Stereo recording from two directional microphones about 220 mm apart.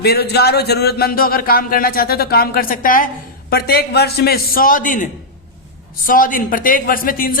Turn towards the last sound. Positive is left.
turn(degrees=40)  # may be behind; listen again after turning